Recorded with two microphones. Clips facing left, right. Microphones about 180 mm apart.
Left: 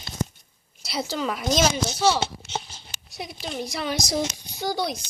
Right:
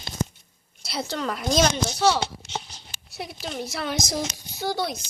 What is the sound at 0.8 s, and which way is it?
Speech, centre (ahead or behind).